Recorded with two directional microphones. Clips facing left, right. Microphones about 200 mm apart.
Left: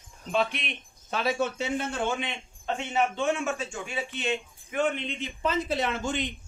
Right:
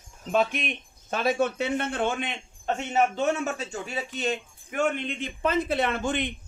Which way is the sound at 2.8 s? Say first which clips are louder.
Right 3 dB; 40° right (ahead or behind).